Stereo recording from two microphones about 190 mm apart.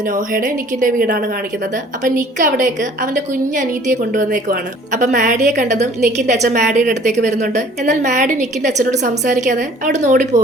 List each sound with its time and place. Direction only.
0.1 s a woman's voice: 45° right (ahead or behind)